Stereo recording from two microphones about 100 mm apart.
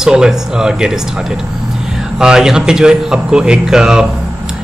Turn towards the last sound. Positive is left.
turn(degrees=-5)  # may be behind; listen again after turning